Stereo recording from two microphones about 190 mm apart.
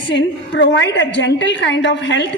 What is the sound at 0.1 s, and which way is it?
A woman's voice, 75° left (ahead or behind).